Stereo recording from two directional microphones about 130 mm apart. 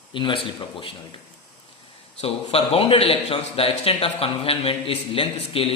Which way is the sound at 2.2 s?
50° left (ahead or behind).